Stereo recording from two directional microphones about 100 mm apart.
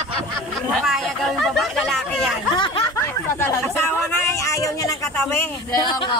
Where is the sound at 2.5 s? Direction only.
50° left (ahead or behind).